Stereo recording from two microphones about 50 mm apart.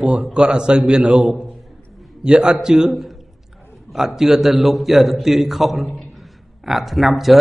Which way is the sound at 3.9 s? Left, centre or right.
Centre.